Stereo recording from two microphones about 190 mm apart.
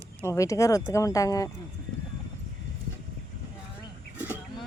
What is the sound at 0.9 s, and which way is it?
Speech, 15° left (ahead or behind).